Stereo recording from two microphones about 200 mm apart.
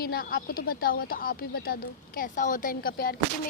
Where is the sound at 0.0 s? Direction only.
50° left (ahead or behind).